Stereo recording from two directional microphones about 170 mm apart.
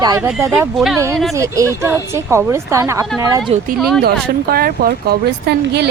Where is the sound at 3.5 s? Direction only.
40° right (ahead or behind).